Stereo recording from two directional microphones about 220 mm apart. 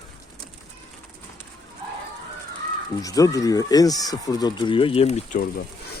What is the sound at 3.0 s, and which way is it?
Speech, 15° left (ahead or behind).